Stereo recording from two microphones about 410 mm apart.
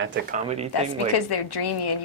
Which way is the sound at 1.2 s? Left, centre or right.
Left.